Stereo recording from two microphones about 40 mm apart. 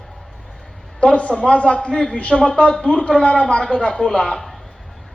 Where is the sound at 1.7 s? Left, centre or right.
Centre.